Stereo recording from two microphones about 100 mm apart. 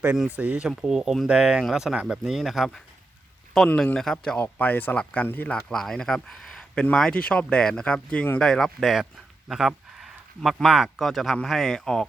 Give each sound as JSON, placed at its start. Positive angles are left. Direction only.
{"t": 0.3, "sound": "speech", "side_deg": -10}
{"t": 4.4, "sound": "speech", "side_deg": 20}
{"t": 5.6, "sound": "speech", "side_deg": 5}